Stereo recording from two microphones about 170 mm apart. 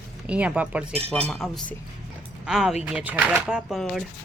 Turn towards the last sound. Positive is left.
turn(degrees=0)  # may be behind; listen again after turning